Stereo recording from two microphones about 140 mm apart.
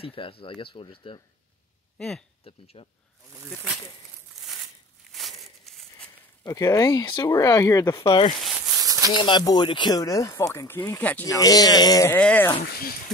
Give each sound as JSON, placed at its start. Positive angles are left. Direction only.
{"t": 0.0, "sound": "speech", "side_deg": 40}
{"t": 2.0, "sound": "speech", "side_deg": 5}
{"t": 2.4, "sound": "speech", "side_deg": 45}
{"t": 5.4, "sound": "a sound", "side_deg": 0}
{"t": 6.4, "sound": "speech", "side_deg": 25}
{"t": 8.0, "sound": "speech", "side_deg": 40}
{"t": 8.8, "sound": "a sound", "side_deg": -25}
{"t": 9.1, "sound": "speech", "side_deg": 35}
{"t": 11.2, "sound": "speech", "side_deg": 25}
{"t": 12.2, "sound": "speech", "side_deg": 10}